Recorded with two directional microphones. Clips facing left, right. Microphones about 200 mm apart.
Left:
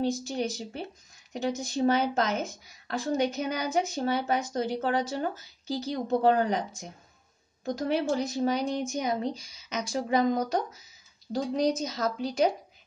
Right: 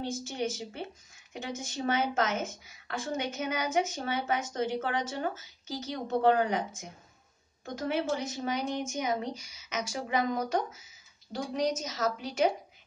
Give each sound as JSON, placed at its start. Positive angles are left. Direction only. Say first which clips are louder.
{"t": 0.0, "sound": "speech", "louder": "left 4 dB", "side_deg": 35}